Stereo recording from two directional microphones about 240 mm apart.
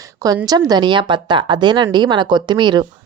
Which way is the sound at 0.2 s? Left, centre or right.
Centre.